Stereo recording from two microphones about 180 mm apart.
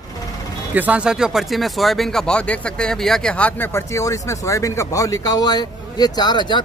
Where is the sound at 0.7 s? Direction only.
10° right (ahead or behind); by 6.6 s 25° left (ahead or behind).